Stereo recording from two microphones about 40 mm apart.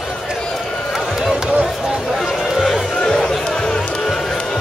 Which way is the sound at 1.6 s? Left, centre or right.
Centre.